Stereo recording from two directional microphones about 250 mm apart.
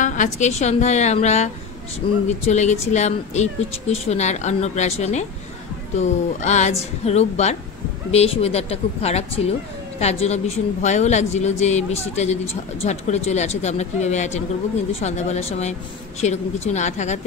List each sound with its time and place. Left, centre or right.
0.0 s speech: left